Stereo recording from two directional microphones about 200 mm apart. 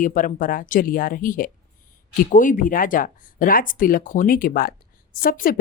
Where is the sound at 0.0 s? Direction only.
40° left (ahead or behind).